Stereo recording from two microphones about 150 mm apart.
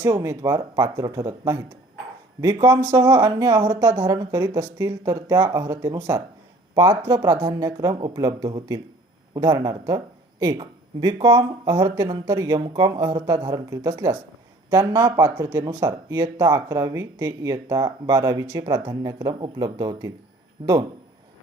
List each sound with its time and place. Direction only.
0.0 s speech: 20° right (ahead or behind)